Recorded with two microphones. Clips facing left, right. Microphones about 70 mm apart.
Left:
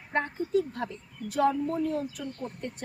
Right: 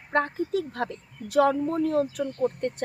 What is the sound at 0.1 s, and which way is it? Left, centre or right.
A woman's voice, right.